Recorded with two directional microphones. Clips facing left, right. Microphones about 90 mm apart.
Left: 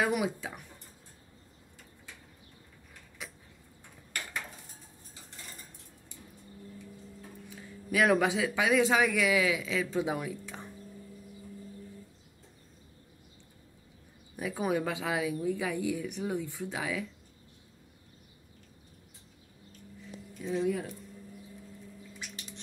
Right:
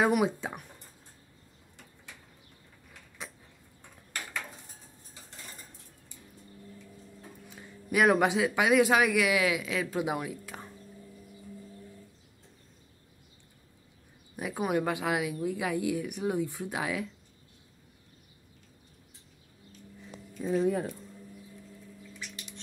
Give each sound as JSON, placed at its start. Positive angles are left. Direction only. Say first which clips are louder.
{"t": 0.0, "sound": "speech", "louder": "right 4 dB", "side_deg": -25}
{"t": 7.4, "sound": "a woman's voice", "louder": "even", "side_deg": -15}
{"t": 14.3, "sound": "a sound", "louder": "even", "side_deg": -15}
{"t": 14.6, "sound": "speech", "louder": "right 2 dB", "side_deg": -10}
{"t": 20.4, "sound": "speech", "louder": "right 3 dB", "side_deg": -40}